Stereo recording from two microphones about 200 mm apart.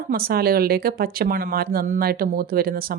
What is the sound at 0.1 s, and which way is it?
Speech, 50° right (ahead or behind).